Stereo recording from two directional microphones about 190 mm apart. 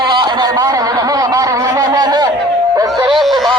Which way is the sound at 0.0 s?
25° right (ahead or behind).